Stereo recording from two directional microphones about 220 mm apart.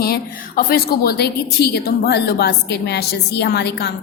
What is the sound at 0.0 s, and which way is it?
A woman's voice, 45° left (ahead or behind).